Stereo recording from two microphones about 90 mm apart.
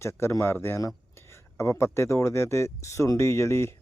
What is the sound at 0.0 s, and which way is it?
Speech, 30° left (ahead or behind).